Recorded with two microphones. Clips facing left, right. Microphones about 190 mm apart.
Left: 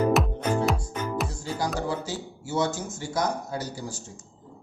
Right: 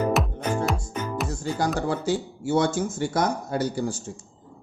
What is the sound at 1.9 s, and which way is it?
A man's voice, 55° right (ahead or behind).